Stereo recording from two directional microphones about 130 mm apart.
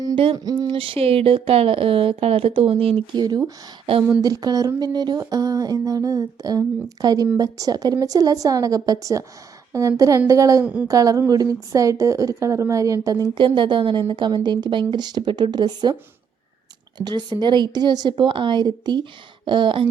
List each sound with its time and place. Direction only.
0.3 s a sound: 30° right (ahead or behind)
0.7 s speech: 45° right (ahead or behind)
3.2 s speech: 30° right (ahead or behind)
4.2 s a sound: 30° right (ahead or behind)
14.1 s speech: 35° right (ahead or behind)
17.0 s speech: 35° right (ahead or behind)